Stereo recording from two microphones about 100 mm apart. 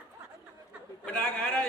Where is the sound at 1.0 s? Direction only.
10° left (ahead or behind).